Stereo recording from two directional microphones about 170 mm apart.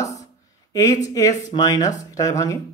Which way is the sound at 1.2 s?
20° left (ahead or behind).